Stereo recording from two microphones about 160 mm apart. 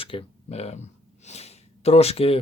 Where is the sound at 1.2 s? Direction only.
40° left (ahead or behind).